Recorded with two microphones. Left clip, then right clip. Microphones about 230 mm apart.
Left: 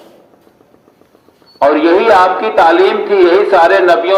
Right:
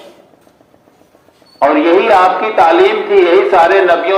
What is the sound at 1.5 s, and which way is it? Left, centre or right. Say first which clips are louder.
A man's voice: even; left.